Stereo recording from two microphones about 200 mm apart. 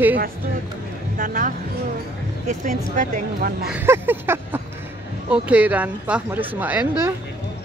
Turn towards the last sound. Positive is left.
turn(degrees=-10)  # may be behind; listen again after turning